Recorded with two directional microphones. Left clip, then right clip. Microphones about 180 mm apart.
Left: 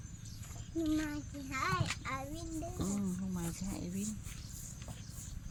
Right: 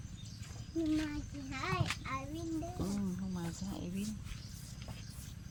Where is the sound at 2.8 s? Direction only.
25° left (ahead or behind).